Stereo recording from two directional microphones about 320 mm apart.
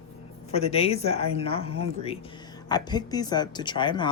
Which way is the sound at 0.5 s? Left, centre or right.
Centre.